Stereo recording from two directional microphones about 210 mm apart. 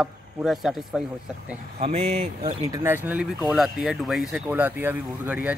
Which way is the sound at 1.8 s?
30° right (ahead or behind).